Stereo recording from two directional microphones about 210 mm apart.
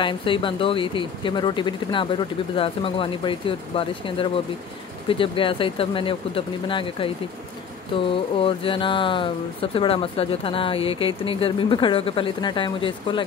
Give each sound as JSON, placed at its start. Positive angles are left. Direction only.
{"t": 0.0, "sound": "speech", "side_deg": 25}
{"t": 8.4, "sound": "speech", "side_deg": 25}